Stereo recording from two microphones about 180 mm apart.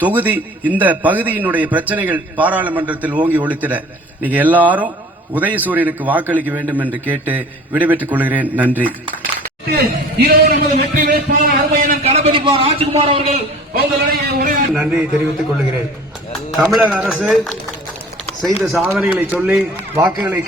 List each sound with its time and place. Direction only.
0.0 s a man's voice: 10° right (ahead or behind)
9.7 s a man's voice: 55° right (ahead or behind)
12.0 s a man's voice: 35° right (ahead or behind)
13.7 s a man's voice: 55° right (ahead or behind)
14.7 s a man's voice: 5° right (ahead or behind)
16.6 s a man's voice: 5° right (ahead or behind)
18.6 s a man's voice: 10° right (ahead or behind)